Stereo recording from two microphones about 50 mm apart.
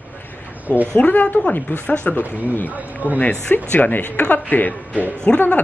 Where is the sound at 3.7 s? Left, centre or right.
Left.